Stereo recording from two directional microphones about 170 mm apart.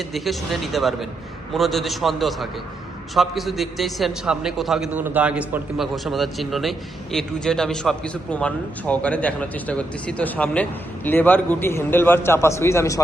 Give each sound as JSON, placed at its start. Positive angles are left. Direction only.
{"t": 0.0, "sound": "a man's voice", "side_deg": 0}